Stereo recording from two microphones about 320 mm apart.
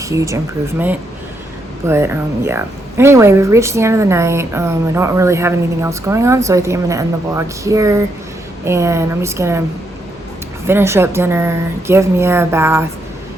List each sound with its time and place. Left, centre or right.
0.0 s speech: centre
1.9 s speech: centre
10.7 s speech: centre